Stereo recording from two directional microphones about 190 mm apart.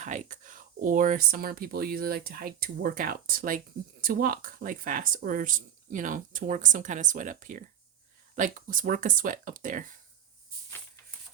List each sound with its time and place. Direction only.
0.0 s speech: 40° right (ahead or behind)